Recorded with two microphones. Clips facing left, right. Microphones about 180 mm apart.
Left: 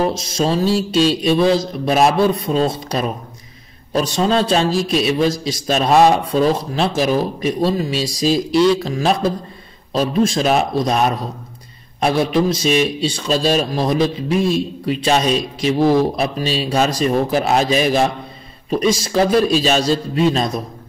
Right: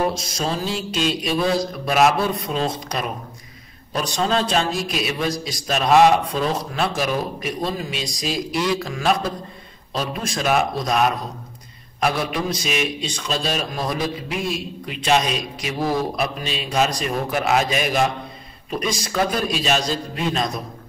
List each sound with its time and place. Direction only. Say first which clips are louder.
0.0 s mantra: left 5 dB; 30° left (ahead or behind)
3.9 s a man's voice: left 5 dB; 30° left (ahead or behind)
6.7 s mantra: left 5 dB; 30° left (ahead or behind)
10.2 s mantra: left 1 dB; 30° left (ahead or behind)
12.6 s a man's voice: left 8 dB; 30° left (ahead or behind)